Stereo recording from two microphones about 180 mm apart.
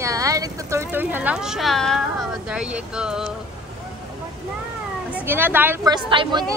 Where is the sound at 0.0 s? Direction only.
20° right (ahead or behind).